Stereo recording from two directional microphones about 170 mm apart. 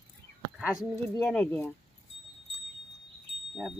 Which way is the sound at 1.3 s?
5° left (ahead or behind).